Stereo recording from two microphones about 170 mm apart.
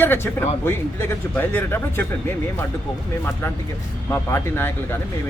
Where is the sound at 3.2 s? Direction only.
15° left (ahead or behind).